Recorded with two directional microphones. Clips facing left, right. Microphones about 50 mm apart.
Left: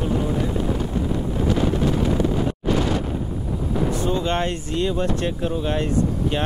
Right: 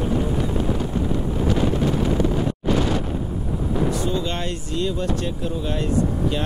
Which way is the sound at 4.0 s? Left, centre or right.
Left.